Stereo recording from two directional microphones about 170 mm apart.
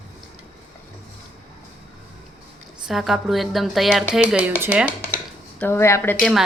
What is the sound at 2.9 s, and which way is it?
Speech, centre (ahead or behind).